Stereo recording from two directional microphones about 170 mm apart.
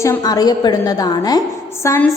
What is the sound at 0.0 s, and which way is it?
A woman's voice, 20° left (ahead or behind).